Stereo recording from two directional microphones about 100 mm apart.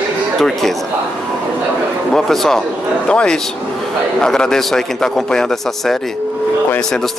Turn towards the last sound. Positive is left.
turn(degrees=5)  # may be behind; listen again after turning